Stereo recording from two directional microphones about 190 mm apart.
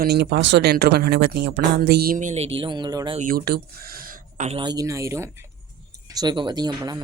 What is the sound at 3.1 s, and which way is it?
Speech, 45° right (ahead or behind).